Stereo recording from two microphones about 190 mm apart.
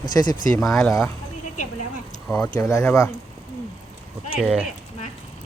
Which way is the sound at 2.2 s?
5° left (ahead or behind).